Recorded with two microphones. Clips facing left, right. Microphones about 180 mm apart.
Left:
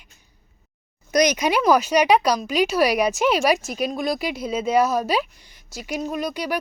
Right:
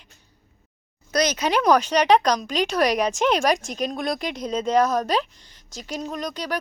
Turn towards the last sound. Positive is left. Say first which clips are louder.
# left 3 dB
turn(degrees=10)  # may be behind; listen again after turning